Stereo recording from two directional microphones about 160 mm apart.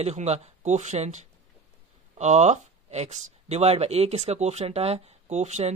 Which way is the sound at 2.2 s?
45° right (ahead or behind).